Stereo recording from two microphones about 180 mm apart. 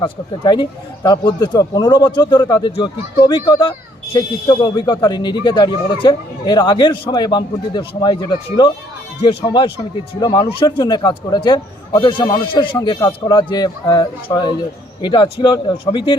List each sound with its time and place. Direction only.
0.0 s a man's voice: 25° left (ahead or behind)